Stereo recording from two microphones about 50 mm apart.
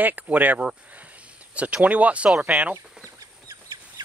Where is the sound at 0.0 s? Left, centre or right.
Right.